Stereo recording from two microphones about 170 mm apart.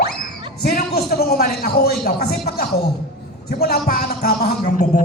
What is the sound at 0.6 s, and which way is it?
A man's voice, 65° left (ahead or behind).